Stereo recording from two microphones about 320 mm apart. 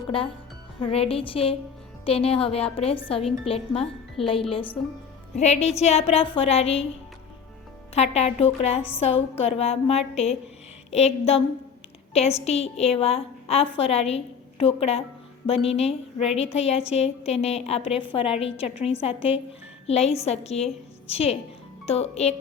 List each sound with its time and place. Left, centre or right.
0.8 s a woman's voice: centre
7.9 s a woman's voice: centre